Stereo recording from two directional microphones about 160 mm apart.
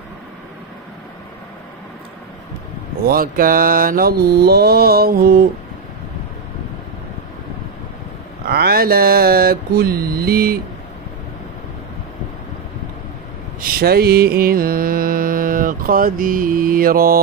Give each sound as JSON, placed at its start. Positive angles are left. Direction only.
{"t": 3.1, "sound": "mantra", "side_deg": -65}
{"t": 8.5, "sound": "mantra", "side_deg": -85}
{"t": 13.6, "sound": "music", "side_deg": -70}